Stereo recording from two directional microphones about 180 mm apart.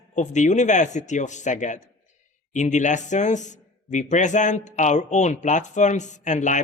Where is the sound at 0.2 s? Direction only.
40° left (ahead or behind).